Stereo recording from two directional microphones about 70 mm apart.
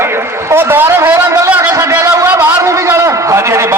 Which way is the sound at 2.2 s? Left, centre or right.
Right.